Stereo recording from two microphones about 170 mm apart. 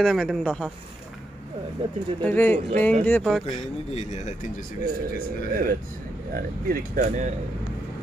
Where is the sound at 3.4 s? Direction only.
35° left (ahead or behind).